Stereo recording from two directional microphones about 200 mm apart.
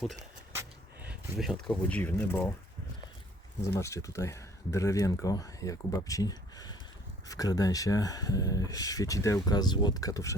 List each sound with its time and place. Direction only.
1.0 s speech: centre (ahead or behind)
3.7 s speech: 15° left (ahead or behind)